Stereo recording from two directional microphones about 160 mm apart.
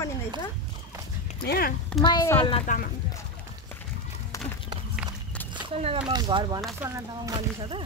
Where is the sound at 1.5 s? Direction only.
70° left (ahead or behind).